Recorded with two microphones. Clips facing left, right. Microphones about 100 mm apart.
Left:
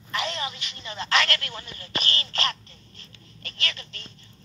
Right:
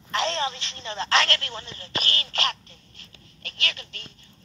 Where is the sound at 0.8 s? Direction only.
30° right (ahead or behind).